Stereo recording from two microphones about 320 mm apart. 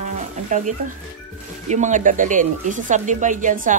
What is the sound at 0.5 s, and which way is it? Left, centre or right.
Speech, right.